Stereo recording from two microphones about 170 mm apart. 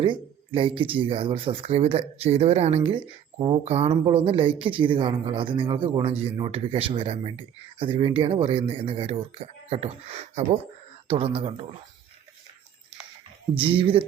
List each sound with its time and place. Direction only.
0.0 s a man's voice: 30° right (ahead or behind)
3.6 s a man's voice: 40° right (ahead or behind)
13.6 s a man's voice: 30° right (ahead or behind)